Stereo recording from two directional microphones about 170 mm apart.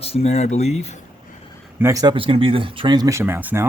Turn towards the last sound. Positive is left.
turn(degrees=-10)  # may be behind; listen again after turning